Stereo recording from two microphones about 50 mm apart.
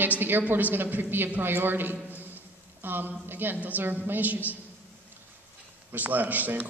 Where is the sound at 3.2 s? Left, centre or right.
Right.